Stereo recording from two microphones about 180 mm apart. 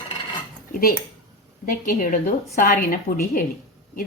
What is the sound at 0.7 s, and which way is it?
Speech, 55° left (ahead or behind).